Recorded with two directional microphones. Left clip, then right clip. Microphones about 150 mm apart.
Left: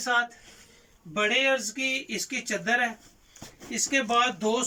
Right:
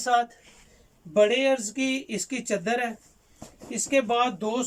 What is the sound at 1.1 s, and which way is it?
Speech, 25° right (ahead or behind).